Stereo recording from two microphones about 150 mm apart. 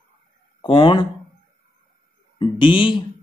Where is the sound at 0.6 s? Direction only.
35° left (ahead or behind).